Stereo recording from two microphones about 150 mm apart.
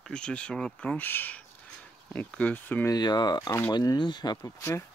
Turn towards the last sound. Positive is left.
turn(degrees=30)  # may be behind; listen again after turning